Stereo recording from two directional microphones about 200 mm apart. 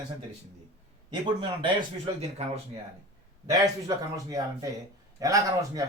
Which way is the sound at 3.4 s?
20° right (ahead or behind).